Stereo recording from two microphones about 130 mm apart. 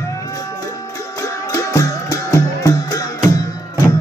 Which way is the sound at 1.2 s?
25° left (ahead or behind).